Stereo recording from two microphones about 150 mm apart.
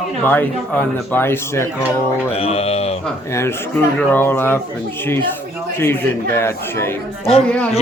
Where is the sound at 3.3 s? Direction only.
15° left (ahead or behind).